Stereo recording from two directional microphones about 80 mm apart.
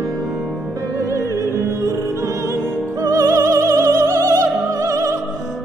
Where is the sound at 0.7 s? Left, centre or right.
Right.